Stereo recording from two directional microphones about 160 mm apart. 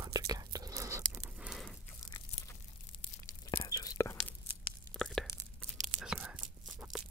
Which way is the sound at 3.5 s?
30° left (ahead or behind).